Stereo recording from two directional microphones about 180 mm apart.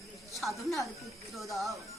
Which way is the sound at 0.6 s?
Centre (ahead or behind).